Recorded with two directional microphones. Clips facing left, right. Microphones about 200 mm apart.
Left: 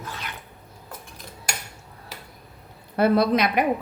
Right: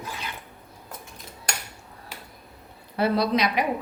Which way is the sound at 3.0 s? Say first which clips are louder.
Left 3 dB; 55° left (ahead or behind).